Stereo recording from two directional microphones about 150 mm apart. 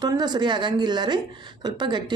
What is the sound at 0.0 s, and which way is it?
Speech, 30° right (ahead or behind).